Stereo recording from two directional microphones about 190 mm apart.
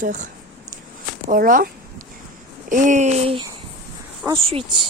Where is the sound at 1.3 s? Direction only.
45° right (ahead or behind).